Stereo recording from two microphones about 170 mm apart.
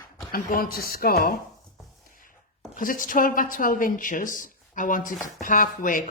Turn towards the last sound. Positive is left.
turn(degrees=50)  # may be behind; listen again after turning